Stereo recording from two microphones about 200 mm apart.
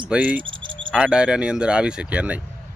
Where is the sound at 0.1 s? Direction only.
5° right (ahead or behind).